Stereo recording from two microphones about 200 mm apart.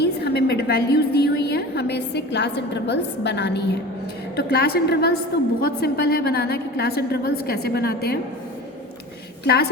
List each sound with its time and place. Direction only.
0.0 s a woman's voice: 55° left (ahead or behind)
9.4 s a woman's voice: 55° left (ahead or behind)